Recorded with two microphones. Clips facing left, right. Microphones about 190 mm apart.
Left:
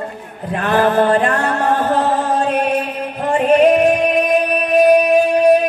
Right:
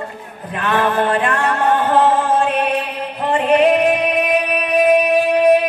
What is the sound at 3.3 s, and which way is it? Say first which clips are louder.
Music: left 2 dB; 45° left (ahead or behind).